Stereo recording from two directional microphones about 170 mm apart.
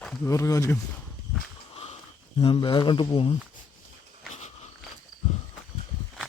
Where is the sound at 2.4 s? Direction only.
30° left (ahead or behind).